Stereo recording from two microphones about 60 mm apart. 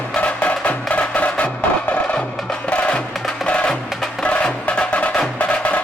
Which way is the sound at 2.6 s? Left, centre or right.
Centre.